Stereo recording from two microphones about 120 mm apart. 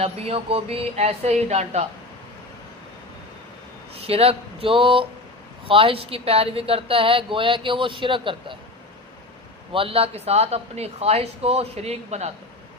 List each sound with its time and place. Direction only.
0.0 s speech: 55° right (ahead or behind)
3.9 s speech: 55° right (ahead or behind)
9.7 s speech: 50° right (ahead or behind)